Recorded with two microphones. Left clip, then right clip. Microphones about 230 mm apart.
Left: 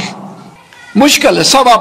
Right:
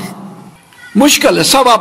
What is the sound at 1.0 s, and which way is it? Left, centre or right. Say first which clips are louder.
Speech: left 1 dB; right.